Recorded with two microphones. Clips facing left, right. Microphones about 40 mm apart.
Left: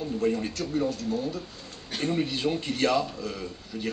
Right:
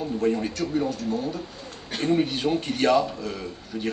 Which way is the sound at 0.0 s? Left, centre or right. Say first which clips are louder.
Right 3 dB; centre.